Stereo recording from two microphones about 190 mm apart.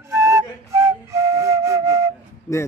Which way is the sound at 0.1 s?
15° right (ahead or behind).